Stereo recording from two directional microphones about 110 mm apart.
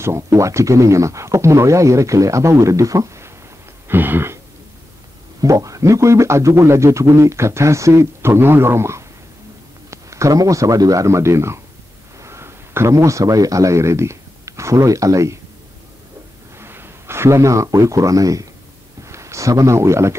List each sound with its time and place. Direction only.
0.0 s a man's voice: 25° right (ahead or behind)
3.9 s a man's voice: 20° right (ahead or behind)
5.4 s a man's voice: 30° right (ahead or behind)
16.5 s a man's voice: 20° right (ahead or behind)